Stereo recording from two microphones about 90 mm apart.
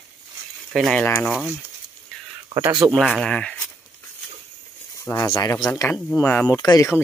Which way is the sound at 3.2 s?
10° left (ahead or behind).